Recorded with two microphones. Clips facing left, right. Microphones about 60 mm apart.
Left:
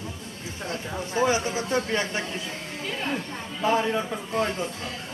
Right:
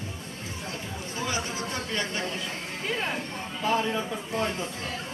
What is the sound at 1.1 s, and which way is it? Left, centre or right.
A man's voice, left.